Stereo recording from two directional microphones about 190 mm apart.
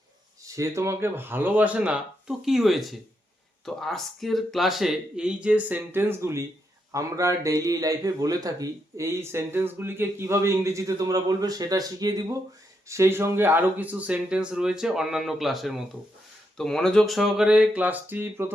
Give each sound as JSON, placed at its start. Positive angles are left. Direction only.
{"t": 0.4, "sound": "speech", "side_deg": -15}